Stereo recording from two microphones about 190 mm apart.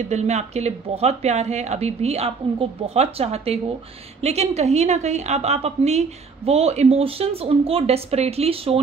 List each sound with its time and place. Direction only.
0.0 s a woman's voice: 35° right (ahead or behind)